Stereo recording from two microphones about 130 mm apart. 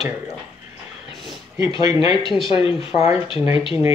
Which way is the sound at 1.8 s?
30° right (ahead or behind).